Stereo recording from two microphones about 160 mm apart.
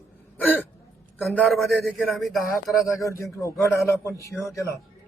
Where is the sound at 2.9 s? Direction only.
20° left (ahead or behind).